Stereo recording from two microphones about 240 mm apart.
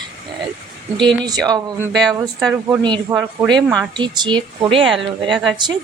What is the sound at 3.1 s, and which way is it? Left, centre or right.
Speech, centre.